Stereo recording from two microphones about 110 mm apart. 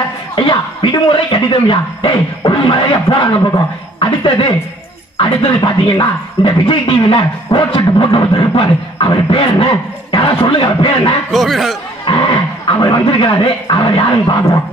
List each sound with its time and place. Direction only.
0.4 s a sound: 55° left (ahead or behind)
1.0 s speech: 50° left (ahead or behind)
11.3 s speech: centre (ahead or behind)
12.0 s speech: 50° left (ahead or behind)